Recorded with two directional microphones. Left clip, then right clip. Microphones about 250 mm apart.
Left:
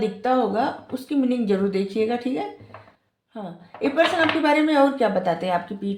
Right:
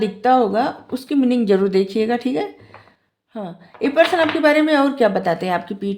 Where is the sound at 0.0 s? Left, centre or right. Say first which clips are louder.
Right 6 dB; right.